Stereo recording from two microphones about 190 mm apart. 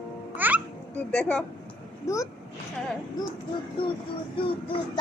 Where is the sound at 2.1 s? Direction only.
15° left (ahead or behind).